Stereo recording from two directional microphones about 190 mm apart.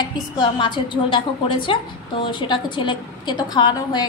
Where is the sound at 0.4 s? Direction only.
25° left (ahead or behind).